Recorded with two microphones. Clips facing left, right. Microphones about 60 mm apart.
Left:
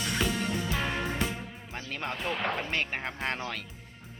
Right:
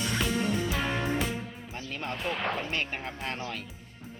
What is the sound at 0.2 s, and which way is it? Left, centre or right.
Music, centre.